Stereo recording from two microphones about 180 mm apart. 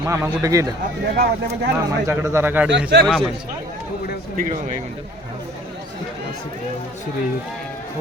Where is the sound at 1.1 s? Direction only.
60° right (ahead or behind).